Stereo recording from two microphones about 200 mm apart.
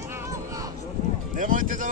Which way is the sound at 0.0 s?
15° right (ahead or behind).